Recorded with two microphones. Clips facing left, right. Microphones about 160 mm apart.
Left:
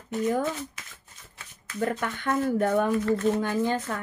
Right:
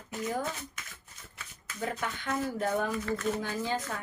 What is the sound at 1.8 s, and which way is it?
Speech, 55° left (ahead or behind).